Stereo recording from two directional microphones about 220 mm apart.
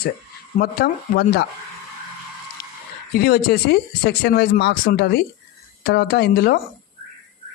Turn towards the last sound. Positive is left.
turn(degrees=45)  # may be behind; listen again after turning